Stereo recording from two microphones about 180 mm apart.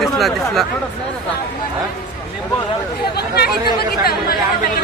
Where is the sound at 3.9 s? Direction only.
60° left (ahead or behind).